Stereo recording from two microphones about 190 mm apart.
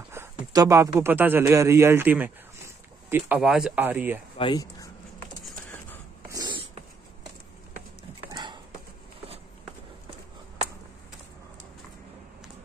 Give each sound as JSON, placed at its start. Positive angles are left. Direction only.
{"t": 0.1, "sound": "a man's voice", "side_deg": -15}
{"t": 4.4, "sound": "speech", "side_deg": 20}
{"t": 6.2, "sound": "dog", "side_deg": -20}
{"t": 8.3, "sound": "clip-clop", "side_deg": -20}